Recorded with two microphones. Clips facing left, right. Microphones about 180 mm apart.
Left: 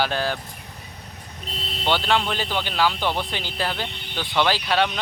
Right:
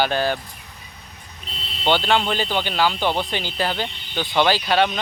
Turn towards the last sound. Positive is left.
turn(degrees=0)  # may be behind; listen again after turning